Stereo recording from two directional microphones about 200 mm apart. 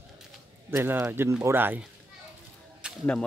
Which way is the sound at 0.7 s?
15° right (ahead or behind).